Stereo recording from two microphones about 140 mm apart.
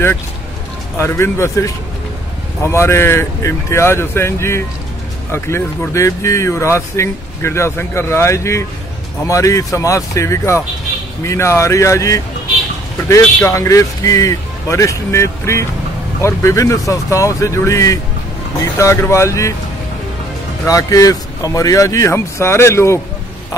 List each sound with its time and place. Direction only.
0.9 s speech: 20° left (ahead or behind)
20.6 s speech: 25° left (ahead or behind)